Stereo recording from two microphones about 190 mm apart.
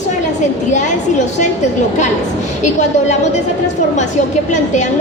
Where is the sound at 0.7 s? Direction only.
40° left (ahead or behind).